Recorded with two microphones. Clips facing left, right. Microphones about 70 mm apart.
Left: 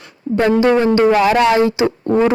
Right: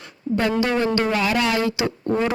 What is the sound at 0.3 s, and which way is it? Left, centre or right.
Speech, left.